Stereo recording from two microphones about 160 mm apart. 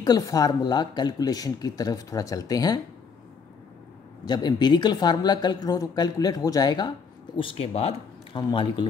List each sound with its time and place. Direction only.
0.0 s speech: 25° left (ahead or behind)
4.2 s speech: 25° left (ahead or behind)
8.4 s speech: 25° left (ahead or behind)